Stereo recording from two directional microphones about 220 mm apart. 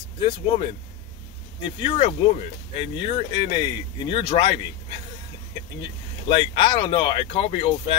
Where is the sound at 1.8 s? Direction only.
25° left (ahead or behind).